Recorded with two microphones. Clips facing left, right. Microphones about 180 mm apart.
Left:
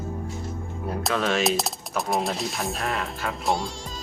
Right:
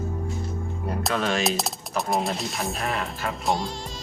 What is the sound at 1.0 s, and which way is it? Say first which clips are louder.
Speech: left 1 dB; centre (ahead or behind).